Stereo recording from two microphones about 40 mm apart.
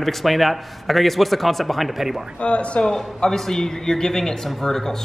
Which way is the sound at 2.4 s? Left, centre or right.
Left.